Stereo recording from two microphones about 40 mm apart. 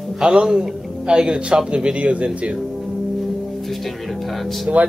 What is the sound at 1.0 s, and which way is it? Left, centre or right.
Speech, right.